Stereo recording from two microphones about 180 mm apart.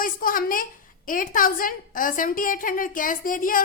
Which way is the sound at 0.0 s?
50° left (ahead or behind).